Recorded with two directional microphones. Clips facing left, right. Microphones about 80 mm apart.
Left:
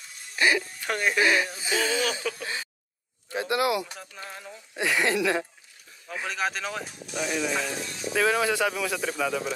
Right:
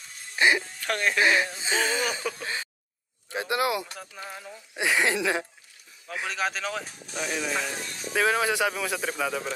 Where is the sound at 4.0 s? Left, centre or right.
Centre.